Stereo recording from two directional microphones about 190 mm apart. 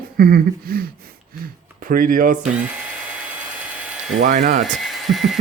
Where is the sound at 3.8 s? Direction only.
5° right (ahead or behind).